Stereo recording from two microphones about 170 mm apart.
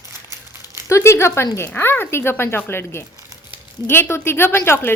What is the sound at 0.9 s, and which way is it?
Speech, 15° left (ahead or behind).